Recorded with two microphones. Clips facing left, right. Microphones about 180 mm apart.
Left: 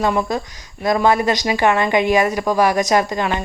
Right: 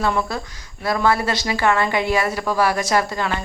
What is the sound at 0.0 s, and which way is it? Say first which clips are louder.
Speech: left 3 dB; 20° left (ahead or behind).